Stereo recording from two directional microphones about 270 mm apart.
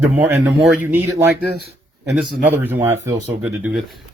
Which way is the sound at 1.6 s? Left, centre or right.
Right.